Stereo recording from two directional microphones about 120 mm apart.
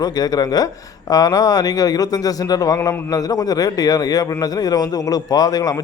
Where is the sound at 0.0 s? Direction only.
35° left (ahead or behind).